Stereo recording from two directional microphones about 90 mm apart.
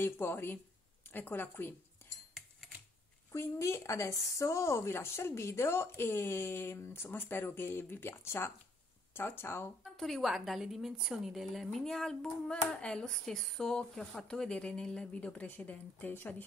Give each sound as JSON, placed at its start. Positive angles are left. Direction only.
{"t": 0.0, "sound": "speech", "side_deg": 25}
{"t": 3.3, "sound": "speech", "side_deg": 30}
{"t": 9.9, "sound": "a woman's voice", "side_deg": 0}